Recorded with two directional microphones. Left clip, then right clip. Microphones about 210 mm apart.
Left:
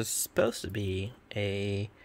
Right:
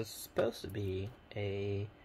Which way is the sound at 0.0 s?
40° left (ahead or behind).